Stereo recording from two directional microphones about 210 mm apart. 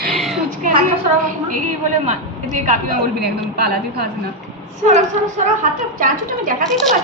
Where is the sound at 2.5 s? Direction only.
35° right (ahead or behind).